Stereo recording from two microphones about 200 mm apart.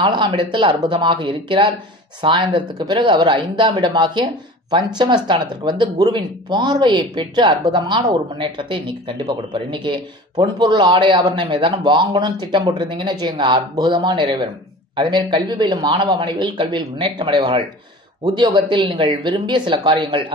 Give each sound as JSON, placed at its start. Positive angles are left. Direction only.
{"t": 0.0, "sound": "speech", "side_deg": -25}